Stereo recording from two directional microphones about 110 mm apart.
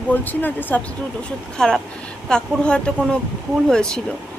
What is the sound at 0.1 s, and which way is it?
Speech, 15° left (ahead or behind).